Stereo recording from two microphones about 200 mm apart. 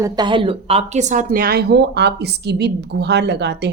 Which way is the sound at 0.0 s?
20° right (ahead or behind).